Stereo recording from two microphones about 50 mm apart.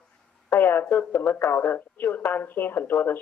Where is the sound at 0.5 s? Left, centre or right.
Left.